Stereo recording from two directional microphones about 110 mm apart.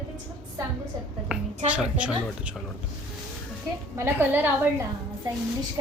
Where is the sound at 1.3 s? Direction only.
10° right (ahead or behind).